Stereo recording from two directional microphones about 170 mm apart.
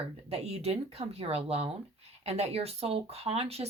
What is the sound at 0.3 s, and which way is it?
Speech, 35° right (ahead or behind).